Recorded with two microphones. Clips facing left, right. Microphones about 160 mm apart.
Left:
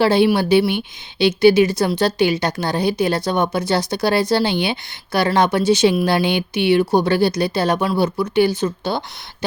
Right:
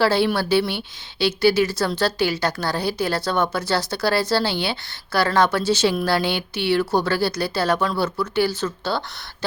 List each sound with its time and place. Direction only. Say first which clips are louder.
0.0 s a woman's voice: left 4 dB; 20° left (ahead or behind)